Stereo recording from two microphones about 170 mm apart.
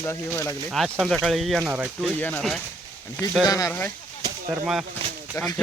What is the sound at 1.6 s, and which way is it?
Speech, 15° right (ahead or behind).